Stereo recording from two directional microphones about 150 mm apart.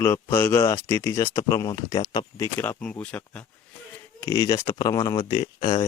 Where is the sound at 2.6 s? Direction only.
10° left (ahead or behind).